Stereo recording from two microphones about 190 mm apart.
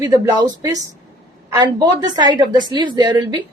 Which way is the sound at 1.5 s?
20° right (ahead or behind).